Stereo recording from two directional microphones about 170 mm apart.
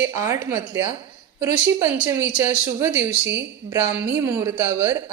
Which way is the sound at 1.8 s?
10° right (ahead or behind).